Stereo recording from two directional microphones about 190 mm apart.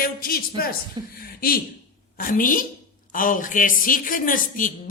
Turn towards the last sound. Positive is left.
turn(degrees=45)  # may be behind; listen again after turning